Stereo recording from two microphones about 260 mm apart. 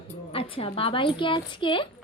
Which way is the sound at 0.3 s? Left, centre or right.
Left.